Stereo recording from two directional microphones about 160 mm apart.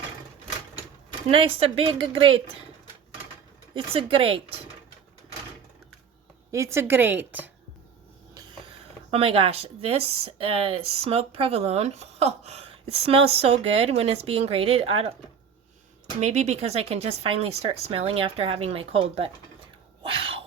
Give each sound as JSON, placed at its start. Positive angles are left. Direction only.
{"t": 1.3, "sound": "speech", "side_deg": -35}
{"t": 3.8, "sound": "speech", "side_deg": -35}
{"t": 6.5, "sound": "a woman's voice", "side_deg": -15}
{"t": 9.0, "sound": "speech", "side_deg": -40}
{"t": 16.2, "sound": "speech", "side_deg": -45}
{"t": 20.0, "sound": "a sound", "side_deg": -35}